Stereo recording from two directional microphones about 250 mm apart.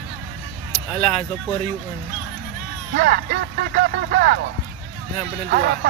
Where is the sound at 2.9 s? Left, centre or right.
Right.